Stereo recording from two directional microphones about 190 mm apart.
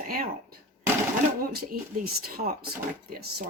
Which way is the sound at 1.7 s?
50° right (ahead or behind).